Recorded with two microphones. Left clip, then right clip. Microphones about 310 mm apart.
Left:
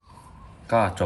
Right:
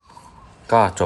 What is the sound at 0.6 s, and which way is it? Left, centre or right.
Speech, centre.